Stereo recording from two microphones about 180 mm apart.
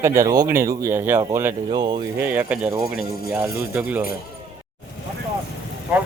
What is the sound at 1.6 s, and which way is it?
Speech, 25° right (ahead or behind).